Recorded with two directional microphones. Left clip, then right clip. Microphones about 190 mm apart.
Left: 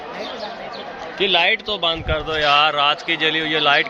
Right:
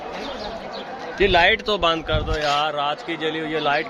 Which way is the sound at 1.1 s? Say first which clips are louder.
Even; 90° right.